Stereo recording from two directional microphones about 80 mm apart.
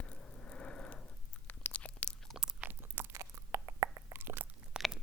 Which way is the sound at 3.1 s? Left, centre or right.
Right.